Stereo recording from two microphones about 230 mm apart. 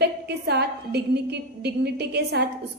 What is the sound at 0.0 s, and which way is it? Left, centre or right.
A woman's voice, right.